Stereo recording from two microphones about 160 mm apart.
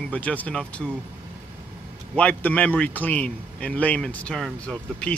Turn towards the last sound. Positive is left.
turn(degrees=5)  # may be behind; listen again after turning